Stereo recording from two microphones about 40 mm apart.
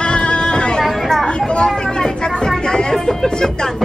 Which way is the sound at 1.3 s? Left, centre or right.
Left.